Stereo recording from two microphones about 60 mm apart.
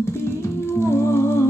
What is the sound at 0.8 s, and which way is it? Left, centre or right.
Music, left.